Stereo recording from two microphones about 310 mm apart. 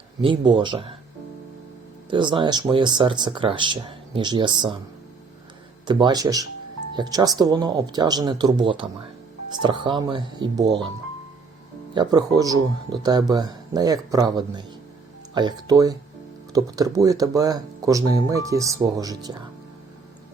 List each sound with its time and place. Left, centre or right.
0.2 s speech: centre
2.0 s speech: centre
5.8 s speech: centre
11.9 s speech: centre